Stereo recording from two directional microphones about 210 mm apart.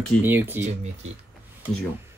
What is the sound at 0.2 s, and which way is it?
Speech, 10° right (ahead or behind).